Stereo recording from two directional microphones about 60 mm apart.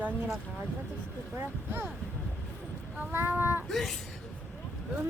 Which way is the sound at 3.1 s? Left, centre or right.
Right.